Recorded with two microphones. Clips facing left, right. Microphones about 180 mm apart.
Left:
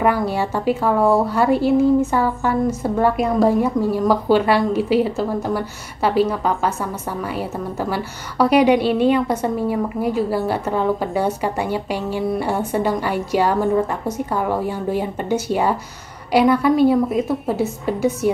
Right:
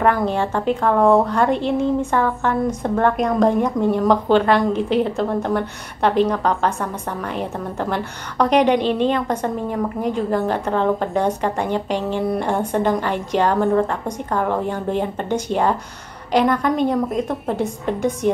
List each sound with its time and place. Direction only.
0.0 s a woman's voice: 10° left (ahead or behind)